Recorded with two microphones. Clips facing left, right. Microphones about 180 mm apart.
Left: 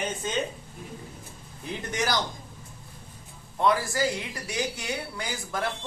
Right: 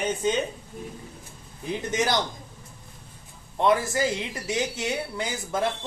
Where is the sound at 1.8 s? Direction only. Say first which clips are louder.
Right 3 dB; 20° right (ahead or behind).